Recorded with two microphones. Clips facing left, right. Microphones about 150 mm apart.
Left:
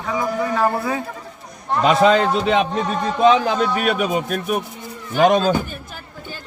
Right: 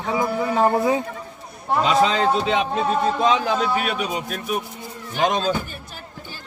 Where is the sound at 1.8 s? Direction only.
60° left (ahead or behind).